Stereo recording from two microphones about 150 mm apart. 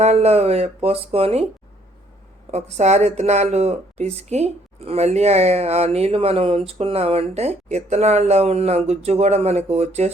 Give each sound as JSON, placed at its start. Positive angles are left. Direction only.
{"t": 0.0, "sound": "speech", "side_deg": -45}
{"t": 2.5, "sound": "speech", "side_deg": -50}